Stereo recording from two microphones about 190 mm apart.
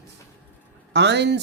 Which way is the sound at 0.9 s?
65° right (ahead or behind).